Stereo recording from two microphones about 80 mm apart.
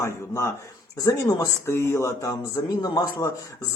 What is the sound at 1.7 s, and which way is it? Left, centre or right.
Speech, left.